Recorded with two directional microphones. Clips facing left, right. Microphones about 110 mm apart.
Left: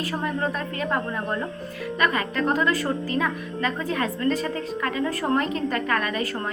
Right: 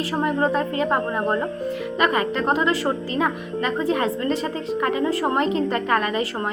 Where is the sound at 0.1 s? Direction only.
25° right (ahead or behind).